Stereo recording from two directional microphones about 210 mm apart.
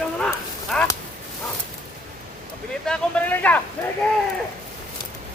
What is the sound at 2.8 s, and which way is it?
Speech, 5° left (ahead or behind).